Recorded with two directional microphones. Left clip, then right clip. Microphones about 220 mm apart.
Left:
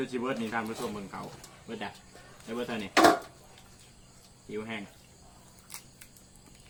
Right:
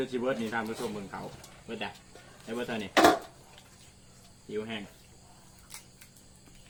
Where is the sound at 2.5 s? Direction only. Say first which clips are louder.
Even; 10° left (ahead or behind).